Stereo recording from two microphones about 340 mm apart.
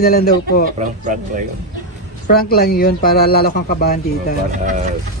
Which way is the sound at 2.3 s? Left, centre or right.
Left.